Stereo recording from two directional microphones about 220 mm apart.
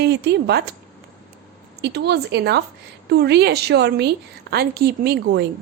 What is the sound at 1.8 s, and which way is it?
Speech, 50° right (ahead or behind).